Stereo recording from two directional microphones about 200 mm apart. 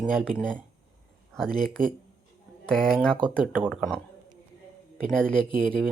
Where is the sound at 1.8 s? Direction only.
45° right (ahead or behind).